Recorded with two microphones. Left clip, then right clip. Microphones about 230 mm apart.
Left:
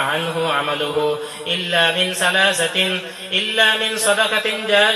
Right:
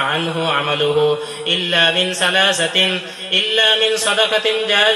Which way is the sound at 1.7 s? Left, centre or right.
Right.